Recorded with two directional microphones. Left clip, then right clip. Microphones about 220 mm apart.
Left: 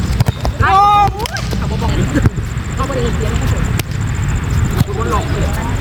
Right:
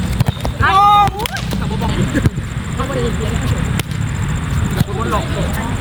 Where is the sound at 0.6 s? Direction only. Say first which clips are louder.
Even; 20° right (ahead or behind).